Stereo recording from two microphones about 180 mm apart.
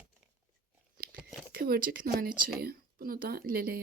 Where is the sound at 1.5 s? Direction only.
55° right (ahead or behind).